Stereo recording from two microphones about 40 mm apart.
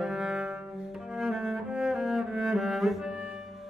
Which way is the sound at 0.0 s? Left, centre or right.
Centre.